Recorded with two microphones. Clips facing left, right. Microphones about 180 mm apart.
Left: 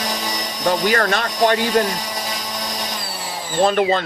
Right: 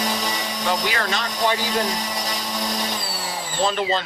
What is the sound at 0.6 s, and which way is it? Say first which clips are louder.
Speech: left 7 dB; 50° left (ahead or behind).